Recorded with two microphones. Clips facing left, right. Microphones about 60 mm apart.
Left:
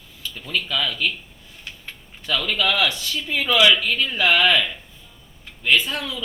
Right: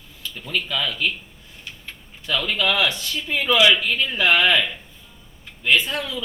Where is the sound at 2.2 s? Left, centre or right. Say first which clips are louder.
Even; right.